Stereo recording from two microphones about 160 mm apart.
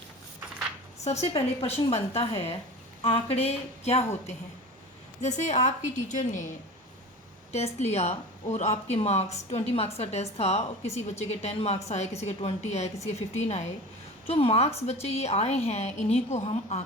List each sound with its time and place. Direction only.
1.3 s a woman's voice: 40° left (ahead or behind)
5.2 s a woman's voice: 50° left (ahead or behind)
7.5 s a woman's voice: 45° left (ahead or behind)